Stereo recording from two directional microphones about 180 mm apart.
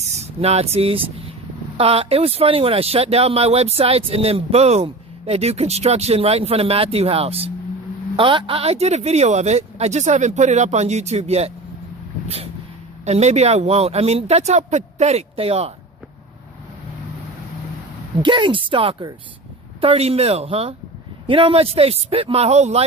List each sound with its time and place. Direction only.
0.2 s speech: 35° right (ahead or behind)
13.1 s speech: 40° right (ahead or behind)
18.2 s speech: 25° right (ahead or behind)